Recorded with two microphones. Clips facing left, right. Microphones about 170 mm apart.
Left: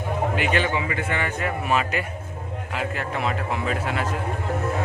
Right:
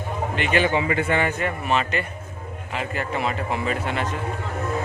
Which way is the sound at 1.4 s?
Centre (ahead or behind).